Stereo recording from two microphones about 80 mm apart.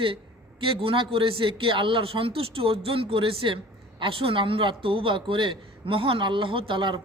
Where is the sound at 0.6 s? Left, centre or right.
Right.